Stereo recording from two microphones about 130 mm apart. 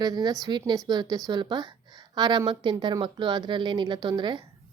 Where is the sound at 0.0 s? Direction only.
30° right (ahead or behind).